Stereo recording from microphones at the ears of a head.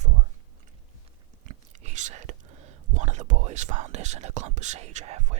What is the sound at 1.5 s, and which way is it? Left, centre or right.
Speech, right.